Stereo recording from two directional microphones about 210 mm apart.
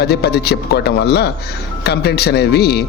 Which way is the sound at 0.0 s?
50° left (ahead or behind).